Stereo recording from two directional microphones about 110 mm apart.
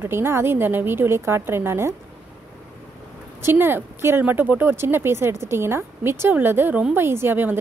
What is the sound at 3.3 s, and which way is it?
A woman's voice, 20° right (ahead or behind).